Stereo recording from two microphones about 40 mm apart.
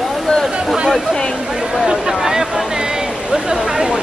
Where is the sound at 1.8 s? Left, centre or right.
Centre.